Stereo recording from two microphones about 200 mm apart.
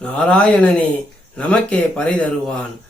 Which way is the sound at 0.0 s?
5° left (ahead or behind).